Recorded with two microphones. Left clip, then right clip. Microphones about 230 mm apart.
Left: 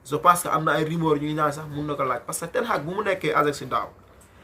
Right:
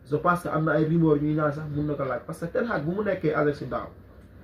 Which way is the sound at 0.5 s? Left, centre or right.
Left.